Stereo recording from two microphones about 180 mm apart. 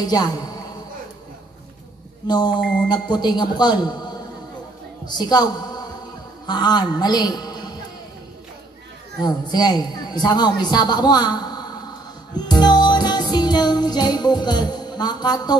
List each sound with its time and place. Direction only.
0.0 s a man's voice: 20° left (ahead or behind)
2.2 s a man's voice: 25° left (ahead or behind)
9.2 s a man's voice: 20° left (ahead or behind)
12.4 s music: 25° left (ahead or behind)